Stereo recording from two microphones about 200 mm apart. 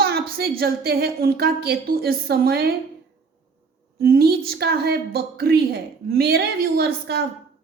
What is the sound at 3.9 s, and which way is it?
A woman's voice, 50° right (ahead or behind).